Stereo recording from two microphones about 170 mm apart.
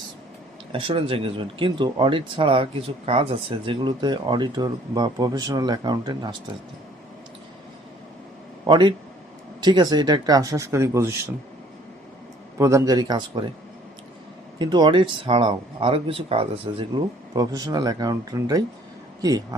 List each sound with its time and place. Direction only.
0.7 s speech: 35° right (ahead or behind)
8.6 s speech: 25° right (ahead or behind)
12.5 s speech: 15° right (ahead or behind)
14.6 s speech: 25° right (ahead or behind)
17.3 s speech: 20° right (ahead or behind)